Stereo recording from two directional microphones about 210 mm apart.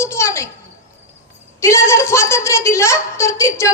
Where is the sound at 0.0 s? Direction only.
15° left (ahead or behind).